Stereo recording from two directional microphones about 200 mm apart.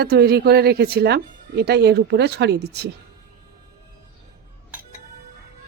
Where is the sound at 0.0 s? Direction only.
55° right (ahead or behind).